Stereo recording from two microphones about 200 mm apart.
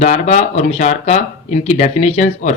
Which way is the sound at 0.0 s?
35° left (ahead or behind).